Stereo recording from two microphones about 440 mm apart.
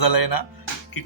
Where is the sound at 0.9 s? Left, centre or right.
Left.